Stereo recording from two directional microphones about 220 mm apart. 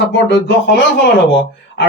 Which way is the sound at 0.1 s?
50° left (ahead or behind).